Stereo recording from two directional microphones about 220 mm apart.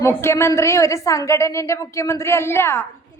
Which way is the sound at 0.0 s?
10° left (ahead or behind).